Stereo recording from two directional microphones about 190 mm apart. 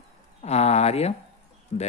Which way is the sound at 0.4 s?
35° left (ahead or behind).